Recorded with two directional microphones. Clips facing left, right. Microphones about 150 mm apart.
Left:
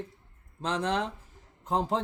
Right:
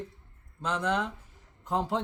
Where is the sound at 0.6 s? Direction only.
30° left (ahead or behind).